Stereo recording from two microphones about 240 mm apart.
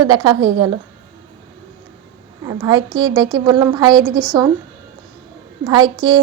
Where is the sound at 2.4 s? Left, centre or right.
Centre.